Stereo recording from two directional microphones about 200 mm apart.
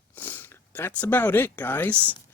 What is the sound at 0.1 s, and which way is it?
Speech, 10° left (ahead or behind).